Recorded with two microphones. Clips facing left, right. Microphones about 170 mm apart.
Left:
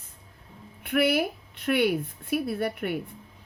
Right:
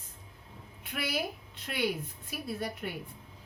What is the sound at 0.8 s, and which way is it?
Speech, 60° left (ahead or behind).